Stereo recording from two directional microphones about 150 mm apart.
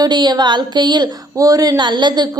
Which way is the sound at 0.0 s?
30° right (ahead or behind).